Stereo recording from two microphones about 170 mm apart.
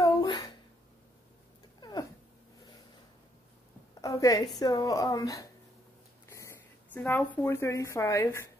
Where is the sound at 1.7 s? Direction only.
25° left (ahead or behind).